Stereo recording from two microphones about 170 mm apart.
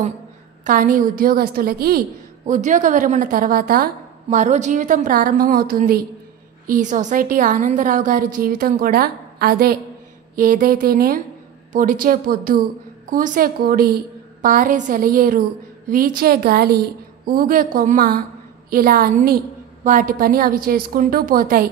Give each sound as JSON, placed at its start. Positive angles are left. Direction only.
{"t": 0.7, "sound": "a woman's voice", "side_deg": -50}
{"t": 6.7, "sound": "a woman's voice", "side_deg": -45}